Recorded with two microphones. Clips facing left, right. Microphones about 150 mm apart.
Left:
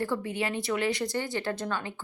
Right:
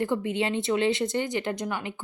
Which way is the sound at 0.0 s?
20° right (ahead or behind).